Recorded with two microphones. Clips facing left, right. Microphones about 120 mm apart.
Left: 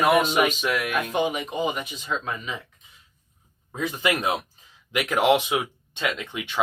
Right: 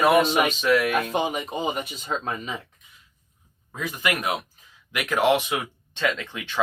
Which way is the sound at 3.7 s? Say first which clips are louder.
Left 2 dB; 25° left (ahead or behind).